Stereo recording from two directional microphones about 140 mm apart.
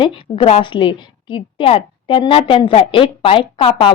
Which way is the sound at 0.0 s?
40° left (ahead or behind).